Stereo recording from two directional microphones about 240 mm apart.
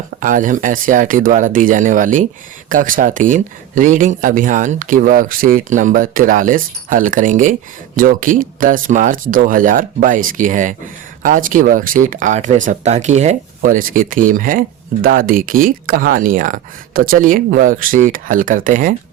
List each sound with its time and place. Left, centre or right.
0.2 s speech: right